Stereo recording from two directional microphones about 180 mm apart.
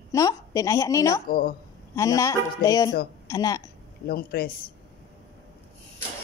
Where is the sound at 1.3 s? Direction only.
55° left (ahead or behind).